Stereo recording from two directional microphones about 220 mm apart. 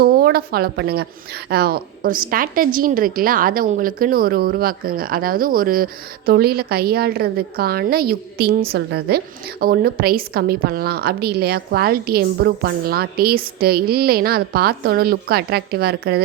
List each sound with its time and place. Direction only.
0.0 s a woman's voice: 45° right (ahead or behind)